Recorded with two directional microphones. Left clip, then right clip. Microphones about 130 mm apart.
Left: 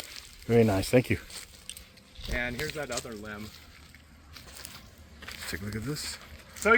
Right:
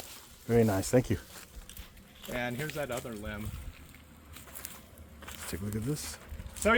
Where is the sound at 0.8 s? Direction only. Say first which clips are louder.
Left 3 dB; 15° left (ahead or behind).